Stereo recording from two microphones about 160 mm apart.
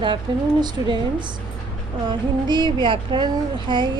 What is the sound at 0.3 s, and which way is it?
Speech, 30° right (ahead or behind).